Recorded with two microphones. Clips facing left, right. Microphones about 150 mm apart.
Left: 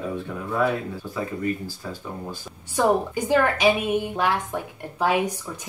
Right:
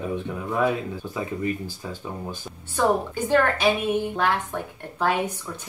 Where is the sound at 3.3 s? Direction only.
10° left (ahead or behind).